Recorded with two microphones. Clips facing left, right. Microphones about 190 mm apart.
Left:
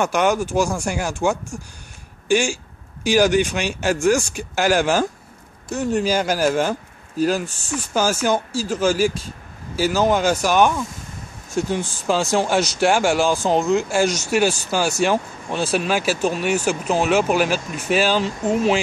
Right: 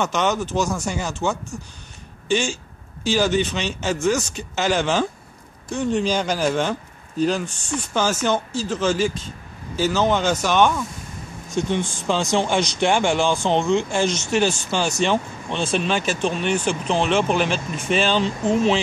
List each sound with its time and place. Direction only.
0.0 s speech: 10° left (ahead or behind)